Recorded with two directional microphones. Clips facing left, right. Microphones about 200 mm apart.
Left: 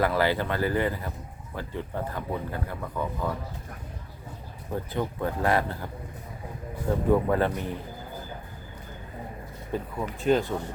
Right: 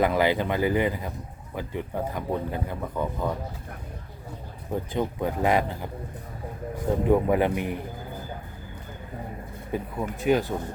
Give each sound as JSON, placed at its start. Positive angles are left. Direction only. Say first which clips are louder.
{"t": 0.0, "sound": "speech", "louder": "right 2 dB", "side_deg": -15}
{"t": 4.7, "sound": "speech", "louder": "right 2 dB", "side_deg": -15}
{"t": 7.1, "sound": "speech", "louder": "right 2 dB", "side_deg": -15}
{"t": 9.7, "sound": "speech", "louder": "right 1 dB", "side_deg": -10}